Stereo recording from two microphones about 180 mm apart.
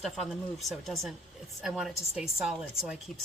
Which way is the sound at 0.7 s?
Centre (ahead or behind).